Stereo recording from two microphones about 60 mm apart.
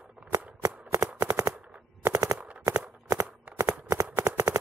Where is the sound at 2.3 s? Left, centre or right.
Centre.